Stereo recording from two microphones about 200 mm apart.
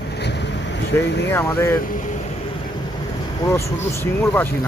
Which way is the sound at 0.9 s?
10° left (ahead or behind).